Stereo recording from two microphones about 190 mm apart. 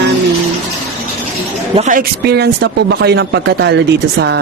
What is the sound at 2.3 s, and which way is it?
Speech, 60° right (ahead or behind).